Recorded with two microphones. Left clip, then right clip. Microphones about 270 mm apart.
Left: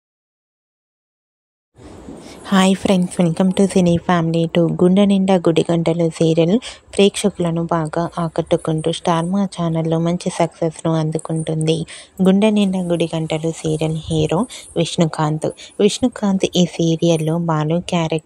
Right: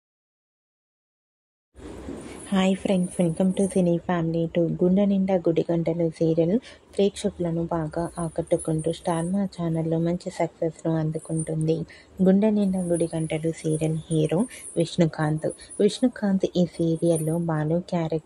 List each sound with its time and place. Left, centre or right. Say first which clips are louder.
2.2 s a woman's voice: left 9 dB; left